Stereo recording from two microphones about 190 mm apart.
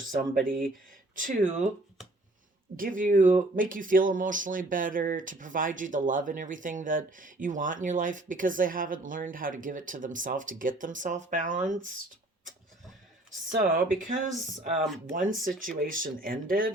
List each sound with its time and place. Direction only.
0.1 s speech: 45° right (ahead or behind)
2.7 s speech: 45° right (ahead or behind)
13.5 s speech: 45° right (ahead or behind)